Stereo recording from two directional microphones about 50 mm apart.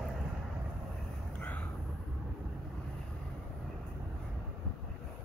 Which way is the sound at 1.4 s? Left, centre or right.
Left.